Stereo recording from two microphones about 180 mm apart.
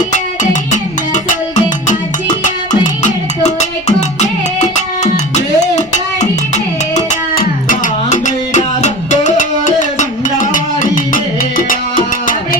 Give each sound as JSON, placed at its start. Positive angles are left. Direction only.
{"t": 2.8, "sound": "music", "side_deg": 40}